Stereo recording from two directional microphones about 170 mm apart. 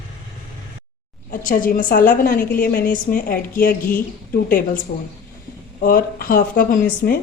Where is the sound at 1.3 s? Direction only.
50° left (ahead or behind).